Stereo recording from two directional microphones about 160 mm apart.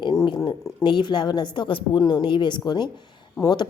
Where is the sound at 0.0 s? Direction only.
25° left (ahead or behind).